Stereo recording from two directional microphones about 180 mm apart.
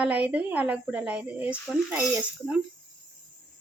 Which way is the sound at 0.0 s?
10° right (ahead or behind).